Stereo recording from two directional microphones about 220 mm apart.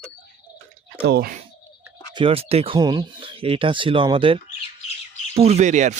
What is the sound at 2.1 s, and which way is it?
Speech, 25° right (ahead or behind).